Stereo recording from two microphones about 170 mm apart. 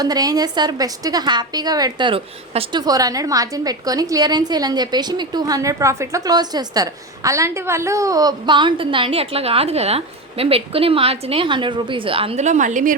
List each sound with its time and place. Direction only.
0.0 s a woman's voice: 20° right (ahead or behind)
2.8 s a woman's voice: 20° right (ahead or behind); by 12.9 s 45° right (ahead or behind)